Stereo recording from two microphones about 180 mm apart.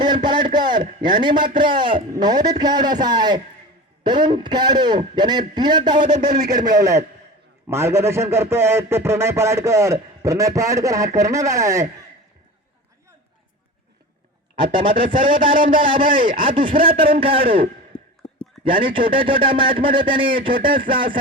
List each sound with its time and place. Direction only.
0.0 s a sound: 25° right (ahead or behind)
1.0 s a man's voice: 25° right (ahead or behind)
6.1 s speech: 45° right (ahead or behind)
6.5 s a man's voice: 20° right (ahead or behind)
14.5 s a man's voice: 25° right (ahead or behind)
15.5 s speech: 50° right (ahead or behind)
16.4 s a man's voice: 25° right (ahead or behind)
17.9 s a sound: 30° left (ahead or behind)
18.6 s a man's voice: 30° right (ahead or behind)